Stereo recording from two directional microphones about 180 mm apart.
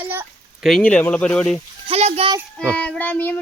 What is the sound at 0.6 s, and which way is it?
Speech, 5° left (ahead or behind).